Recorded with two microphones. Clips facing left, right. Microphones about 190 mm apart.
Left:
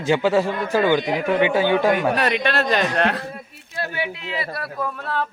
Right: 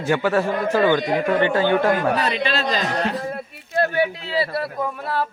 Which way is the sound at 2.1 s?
65° left (ahead or behind).